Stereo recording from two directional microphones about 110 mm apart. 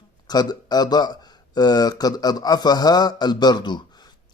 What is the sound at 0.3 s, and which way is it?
Speech, 40° left (ahead or behind).